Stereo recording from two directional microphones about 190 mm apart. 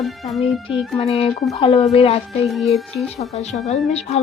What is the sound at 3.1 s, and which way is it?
Speech, 35° left (ahead or behind).